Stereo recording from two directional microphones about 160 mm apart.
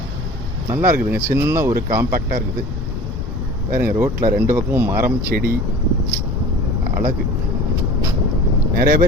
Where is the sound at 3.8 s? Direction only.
15° right (ahead or behind).